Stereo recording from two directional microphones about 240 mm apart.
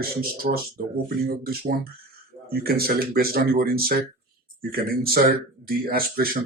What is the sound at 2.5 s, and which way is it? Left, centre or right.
Speech, right.